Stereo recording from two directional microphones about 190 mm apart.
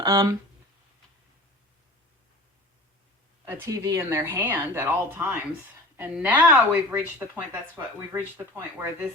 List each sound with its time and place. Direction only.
0.0 s speech: 20° right (ahead or behind)
3.4 s speech: 15° right (ahead or behind)